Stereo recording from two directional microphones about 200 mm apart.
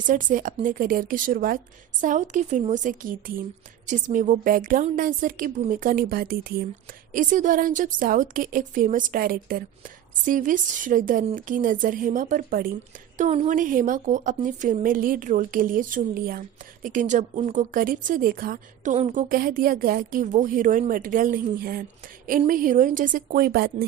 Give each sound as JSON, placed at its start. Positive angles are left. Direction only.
{"t": 0.0, "sound": "a woman's voice", "side_deg": -40}
{"t": 13.1, "sound": "a woman's voice", "side_deg": -35}